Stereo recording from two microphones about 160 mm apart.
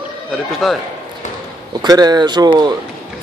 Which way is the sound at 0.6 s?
Centre (ahead or behind).